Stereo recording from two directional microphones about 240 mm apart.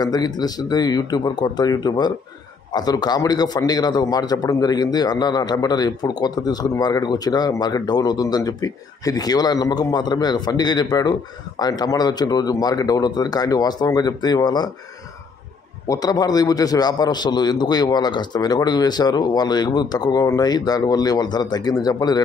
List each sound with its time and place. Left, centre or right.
0.0 s a man's voice: centre
15.9 s a man's voice: centre